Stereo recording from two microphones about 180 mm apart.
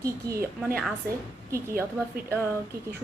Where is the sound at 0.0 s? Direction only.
15° right (ahead or behind).